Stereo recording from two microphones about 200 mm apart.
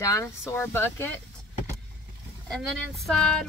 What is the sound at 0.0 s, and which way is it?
Speech, 15° left (ahead or behind).